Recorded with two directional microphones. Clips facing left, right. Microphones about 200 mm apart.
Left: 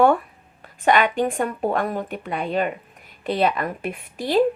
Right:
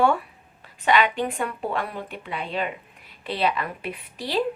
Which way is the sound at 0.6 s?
50° left (ahead or behind).